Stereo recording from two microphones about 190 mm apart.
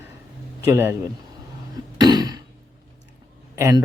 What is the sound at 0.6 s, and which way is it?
Speech, 15° right (ahead or behind).